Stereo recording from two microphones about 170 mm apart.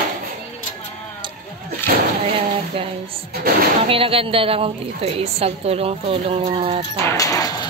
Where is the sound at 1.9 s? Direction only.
55° right (ahead or behind).